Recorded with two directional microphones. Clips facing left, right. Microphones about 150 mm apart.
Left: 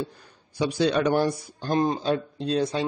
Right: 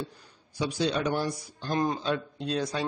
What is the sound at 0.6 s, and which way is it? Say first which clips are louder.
Speech: left 5 dB; 60° left (ahead or behind).